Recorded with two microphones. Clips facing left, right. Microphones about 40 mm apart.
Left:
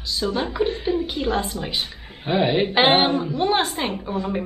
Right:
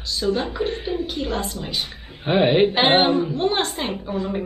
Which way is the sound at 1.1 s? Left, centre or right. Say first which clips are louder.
Left 2 dB; centre.